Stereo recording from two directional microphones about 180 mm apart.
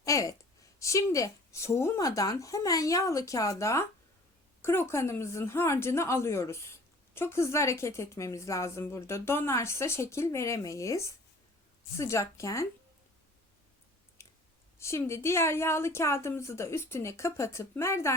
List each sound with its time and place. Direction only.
0.0 s a sound: 20° left (ahead or behind)
0.8 s a woman's voice: 15° left (ahead or behind)
14.8 s a woman's voice: 15° left (ahead or behind)